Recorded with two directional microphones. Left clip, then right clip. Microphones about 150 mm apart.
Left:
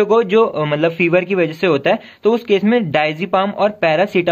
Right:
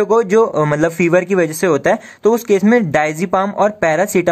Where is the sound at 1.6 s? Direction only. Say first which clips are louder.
Right 1 dB; 30° right (ahead or behind).